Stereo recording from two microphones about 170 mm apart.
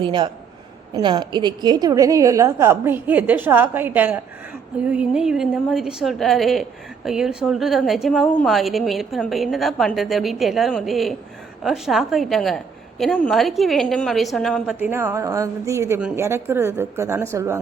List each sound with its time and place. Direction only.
0.0 s a man's voice: 30° right (ahead or behind); by 14.8 s centre (ahead or behind)
14.8 s a woman's voice: 15° right (ahead or behind)